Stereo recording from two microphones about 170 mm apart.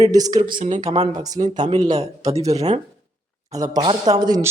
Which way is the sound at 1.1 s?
20° right (ahead or behind).